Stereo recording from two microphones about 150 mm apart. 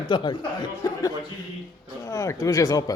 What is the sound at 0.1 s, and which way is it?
Speech, 30° left (ahead or behind).